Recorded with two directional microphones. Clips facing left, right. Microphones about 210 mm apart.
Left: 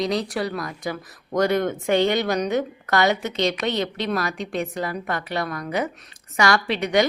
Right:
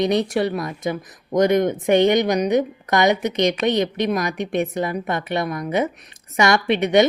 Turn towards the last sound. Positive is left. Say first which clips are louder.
# right 4 dB
turn(degrees=-20)  # may be behind; listen again after turning